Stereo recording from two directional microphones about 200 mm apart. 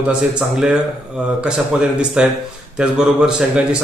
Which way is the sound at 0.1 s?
5° right (ahead or behind).